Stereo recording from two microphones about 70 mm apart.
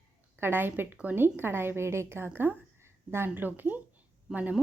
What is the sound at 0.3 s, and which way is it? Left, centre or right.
A woman's voice, right.